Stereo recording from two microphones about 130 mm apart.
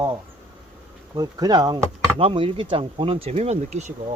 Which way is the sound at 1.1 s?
30° right (ahead or behind).